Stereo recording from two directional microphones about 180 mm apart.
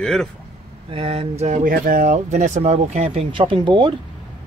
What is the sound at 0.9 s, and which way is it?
Speech, 35° right (ahead or behind).